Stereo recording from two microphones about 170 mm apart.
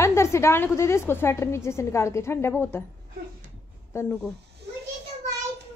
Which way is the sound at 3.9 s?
15° left (ahead or behind).